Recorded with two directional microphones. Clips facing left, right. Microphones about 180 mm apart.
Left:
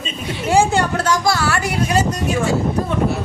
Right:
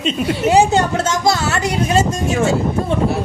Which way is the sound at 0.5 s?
20° right (ahead or behind).